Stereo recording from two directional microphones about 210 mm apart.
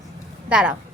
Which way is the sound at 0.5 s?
5° right (ahead or behind).